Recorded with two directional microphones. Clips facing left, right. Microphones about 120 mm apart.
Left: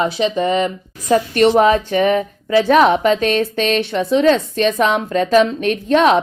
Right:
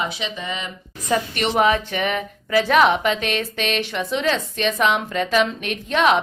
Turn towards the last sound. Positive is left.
turn(degrees=40)  # may be behind; listen again after turning